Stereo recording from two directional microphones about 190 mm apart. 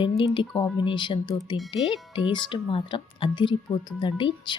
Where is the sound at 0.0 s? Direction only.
25° left (ahead or behind).